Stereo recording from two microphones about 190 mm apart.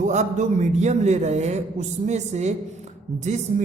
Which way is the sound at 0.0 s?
40° right (ahead or behind).